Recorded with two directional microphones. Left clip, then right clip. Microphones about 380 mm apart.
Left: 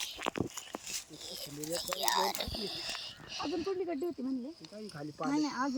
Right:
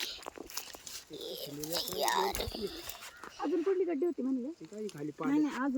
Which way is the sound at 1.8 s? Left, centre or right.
Centre.